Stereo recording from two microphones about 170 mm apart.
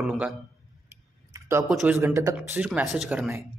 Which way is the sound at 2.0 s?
15° right (ahead or behind).